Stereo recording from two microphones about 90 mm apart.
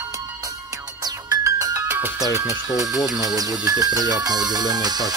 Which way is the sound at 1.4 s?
40° right (ahead or behind).